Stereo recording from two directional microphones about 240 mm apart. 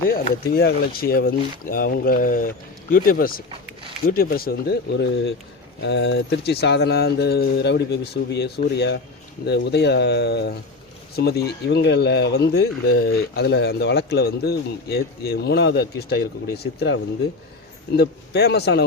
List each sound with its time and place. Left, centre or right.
0.1 s speech: left
17.9 s speech: left